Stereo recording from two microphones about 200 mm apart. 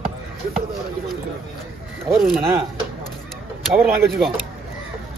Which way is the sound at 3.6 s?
Centre (ahead or behind).